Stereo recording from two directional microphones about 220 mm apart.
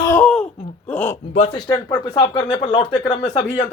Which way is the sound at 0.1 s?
5° left (ahead or behind).